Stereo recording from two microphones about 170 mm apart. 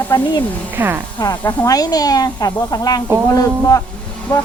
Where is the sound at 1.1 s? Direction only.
25° left (ahead or behind).